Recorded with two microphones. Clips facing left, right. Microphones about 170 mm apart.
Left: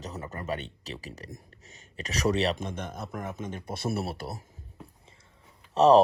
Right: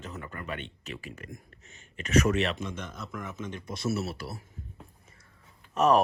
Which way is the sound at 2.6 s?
55° left (ahead or behind).